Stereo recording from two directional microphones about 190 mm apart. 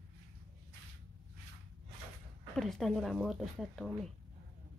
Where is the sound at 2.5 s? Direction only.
Centre (ahead or behind).